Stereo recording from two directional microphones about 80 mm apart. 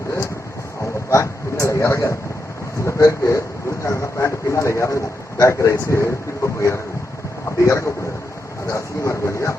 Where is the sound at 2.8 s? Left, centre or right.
Left.